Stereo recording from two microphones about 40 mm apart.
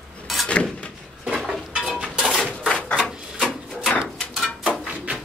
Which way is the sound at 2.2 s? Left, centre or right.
Centre.